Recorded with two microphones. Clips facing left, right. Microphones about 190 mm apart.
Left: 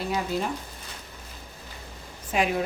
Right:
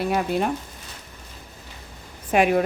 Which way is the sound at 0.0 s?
60° right (ahead or behind).